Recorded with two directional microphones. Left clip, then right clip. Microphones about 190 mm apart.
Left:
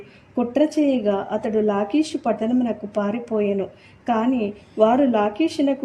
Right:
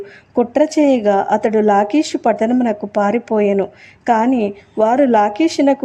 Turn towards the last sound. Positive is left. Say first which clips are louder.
# right 7 dB
turn(degrees=-25)  # may be behind; listen again after turning